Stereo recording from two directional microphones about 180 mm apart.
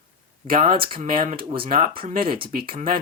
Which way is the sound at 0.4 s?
45° right (ahead or behind).